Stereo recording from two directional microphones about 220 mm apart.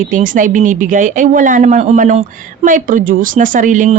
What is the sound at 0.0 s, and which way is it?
Speech, 35° right (ahead or behind).